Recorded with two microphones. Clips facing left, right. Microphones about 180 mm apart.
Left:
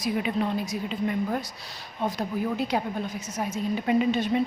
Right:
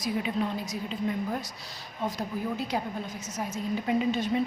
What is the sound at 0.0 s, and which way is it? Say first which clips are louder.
Speech: left 3 dB; 60° left (ahead or behind).